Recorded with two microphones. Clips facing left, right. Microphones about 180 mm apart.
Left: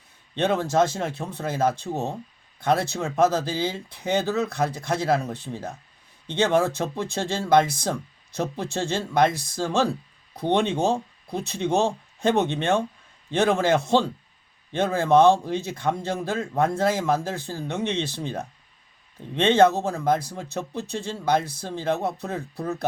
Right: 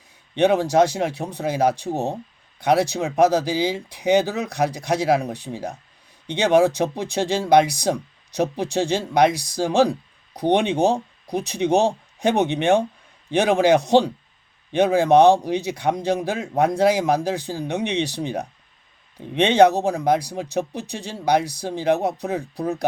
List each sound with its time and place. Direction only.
0.3 s speech: 15° right (ahead or behind)